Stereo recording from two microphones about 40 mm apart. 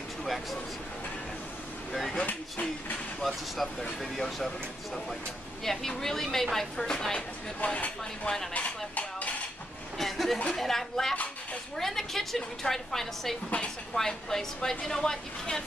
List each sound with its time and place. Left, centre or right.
0.2 s a sound: centre
3.2 s speech: centre
5.6 s a woman's voice: centre
7.6 s speech: left
8.5 s dishes: left
9.9 s a woman's voice: centre